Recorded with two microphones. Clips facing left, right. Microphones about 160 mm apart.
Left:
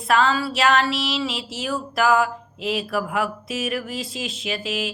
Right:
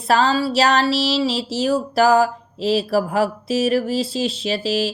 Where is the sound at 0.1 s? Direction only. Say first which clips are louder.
Right 3 dB; 35° right (ahead or behind).